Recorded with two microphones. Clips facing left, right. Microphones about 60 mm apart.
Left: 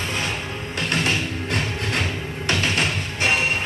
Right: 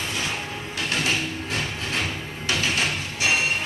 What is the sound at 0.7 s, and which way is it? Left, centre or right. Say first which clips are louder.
Music: left 2 dB; left.